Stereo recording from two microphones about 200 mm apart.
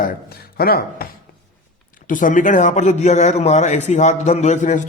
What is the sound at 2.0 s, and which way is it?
A man's voice, 40° left (ahead or behind).